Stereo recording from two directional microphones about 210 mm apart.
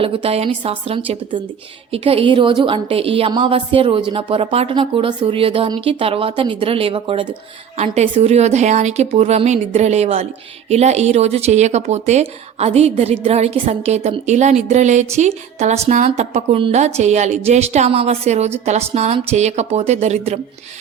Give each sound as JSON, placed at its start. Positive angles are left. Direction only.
{"t": 0.0, "sound": "a woman's voice", "side_deg": -25}
{"t": 15.5, "sound": "music", "side_deg": -30}
{"t": 15.9, "sound": "speech", "side_deg": -35}